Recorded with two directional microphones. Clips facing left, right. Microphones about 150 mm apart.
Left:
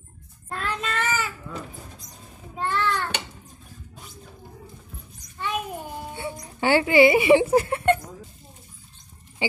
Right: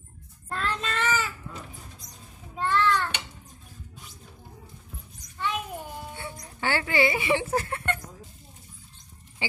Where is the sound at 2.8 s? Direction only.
45° left (ahead or behind).